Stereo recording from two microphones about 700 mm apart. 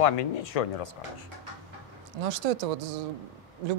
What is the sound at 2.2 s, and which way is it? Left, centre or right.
Speech, right.